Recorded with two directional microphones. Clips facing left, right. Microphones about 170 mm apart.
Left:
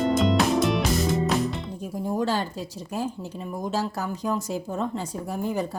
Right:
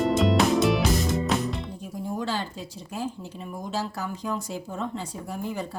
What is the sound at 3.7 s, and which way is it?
Speech, 45° left (ahead or behind).